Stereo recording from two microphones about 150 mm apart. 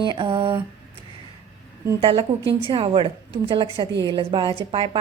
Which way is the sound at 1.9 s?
35° right (ahead or behind).